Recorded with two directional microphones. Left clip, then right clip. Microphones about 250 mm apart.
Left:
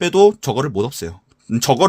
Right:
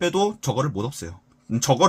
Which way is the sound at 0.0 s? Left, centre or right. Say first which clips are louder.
Left 9 dB; left.